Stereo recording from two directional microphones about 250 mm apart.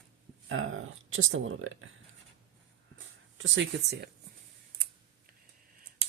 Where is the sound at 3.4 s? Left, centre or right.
Right.